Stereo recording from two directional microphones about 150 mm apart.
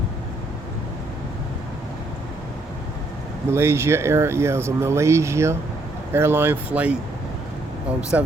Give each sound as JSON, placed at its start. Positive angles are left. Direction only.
{"t": 3.5, "sound": "speech", "side_deg": -15}
{"t": 8.1, "sound": "speech", "side_deg": -10}